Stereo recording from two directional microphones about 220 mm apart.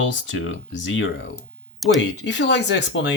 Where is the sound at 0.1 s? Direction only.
55° left (ahead or behind).